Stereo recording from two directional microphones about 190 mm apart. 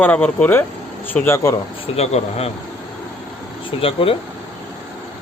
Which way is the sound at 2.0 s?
35° left (ahead or behind).